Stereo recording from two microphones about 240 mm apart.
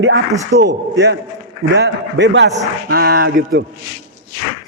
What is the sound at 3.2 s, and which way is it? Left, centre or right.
Speech, right.